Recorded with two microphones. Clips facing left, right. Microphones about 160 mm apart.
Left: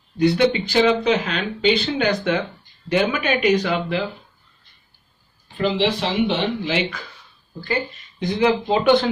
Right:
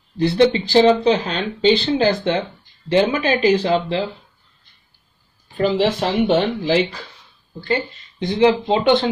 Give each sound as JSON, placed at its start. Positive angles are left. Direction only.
{"t": 0.2, "sound": "speech", "side_deg": -30}
{"t": 5.6, "sound": "speech", "side_deg": -45}
{"t": 7.6, "sound": "speech", "side_deg": -25}